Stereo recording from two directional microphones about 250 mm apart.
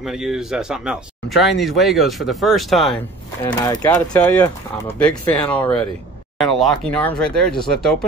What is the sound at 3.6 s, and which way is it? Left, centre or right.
Speech, centre.